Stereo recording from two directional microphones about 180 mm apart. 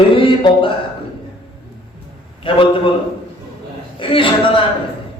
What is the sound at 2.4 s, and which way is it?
Speech, 30° left (ahead or behind).